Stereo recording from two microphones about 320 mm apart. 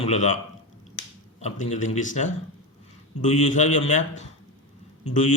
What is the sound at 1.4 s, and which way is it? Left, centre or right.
A man's voice, left.